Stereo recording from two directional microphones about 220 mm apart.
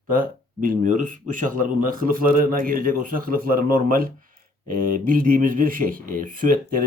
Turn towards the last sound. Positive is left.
turn(degrees=-40)  # may be behind; listen again after turning